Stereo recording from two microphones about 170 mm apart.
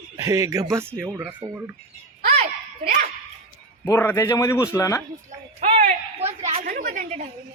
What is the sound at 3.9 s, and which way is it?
Speech, 15° left (ahead or behind).